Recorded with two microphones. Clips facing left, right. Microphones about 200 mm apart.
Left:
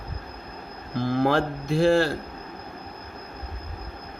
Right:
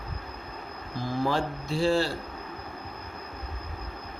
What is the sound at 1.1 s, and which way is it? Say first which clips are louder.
Speech: left 5 dB; 55° left (ahead or behind).